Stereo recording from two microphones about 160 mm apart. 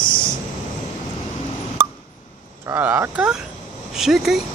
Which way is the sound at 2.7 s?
15° right (ahead or behind).